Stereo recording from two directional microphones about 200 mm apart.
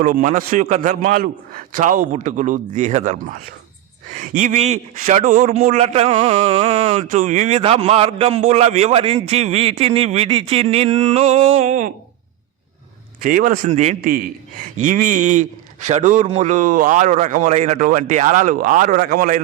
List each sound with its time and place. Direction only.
0.0 s a man's voice: 40° right (ahead or behind)
13.2 s a man's voice: 45° right (ahead or behind)